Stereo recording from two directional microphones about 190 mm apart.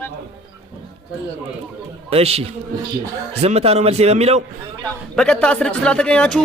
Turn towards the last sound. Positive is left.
turn(degrees=5)  # may be behind; listen again after turning